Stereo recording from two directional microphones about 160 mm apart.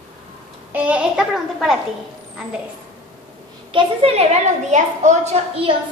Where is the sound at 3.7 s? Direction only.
35° right (ahead or behind).